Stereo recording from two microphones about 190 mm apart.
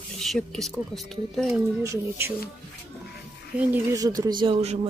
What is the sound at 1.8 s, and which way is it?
Speech, 10° right (ahead or behind).